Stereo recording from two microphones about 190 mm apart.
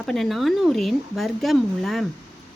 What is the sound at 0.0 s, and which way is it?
Speech, centre (ahead or behind).